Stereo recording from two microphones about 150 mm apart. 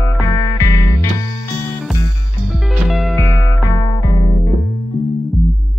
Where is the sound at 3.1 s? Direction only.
20° left (ahead or behind).